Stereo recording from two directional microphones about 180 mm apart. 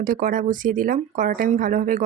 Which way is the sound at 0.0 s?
50° right (ahead or behind).